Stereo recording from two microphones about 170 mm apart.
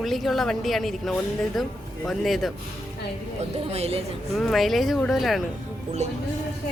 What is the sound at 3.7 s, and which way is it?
Speech, 35° right (ahead or behind).